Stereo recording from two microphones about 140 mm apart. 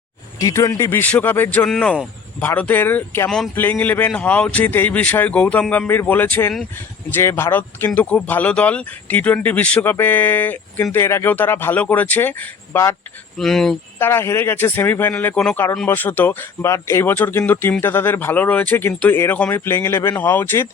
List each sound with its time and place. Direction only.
0.3 s speech: 25° left (ahead or behind)
3.2 s speech: 5° left (ahead or behind); by 13.0 s 20° left (ahead or behind)
13.3 s speech: centre (ahead or behind)
14.0 s speech: 15° left (ahead or behind)